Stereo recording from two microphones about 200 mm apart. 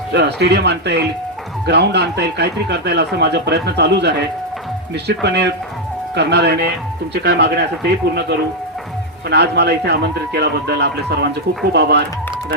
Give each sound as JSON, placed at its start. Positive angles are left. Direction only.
{"t": 0.1, "sound": "speech", "side_deg": -55}
{"t": 9.3, "sound": "speech", "side_deg": -55}